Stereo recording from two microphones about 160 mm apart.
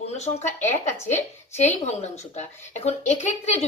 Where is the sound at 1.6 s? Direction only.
45° left (ahead or behind).